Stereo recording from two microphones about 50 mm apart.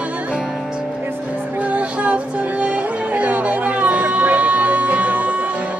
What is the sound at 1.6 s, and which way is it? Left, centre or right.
Music, right.